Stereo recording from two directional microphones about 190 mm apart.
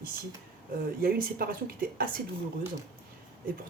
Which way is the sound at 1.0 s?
50° right (ahead or behind).